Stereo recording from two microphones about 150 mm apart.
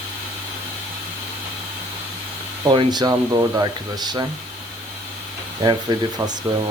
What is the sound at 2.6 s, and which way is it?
Speech, 30° right (ahead or behind).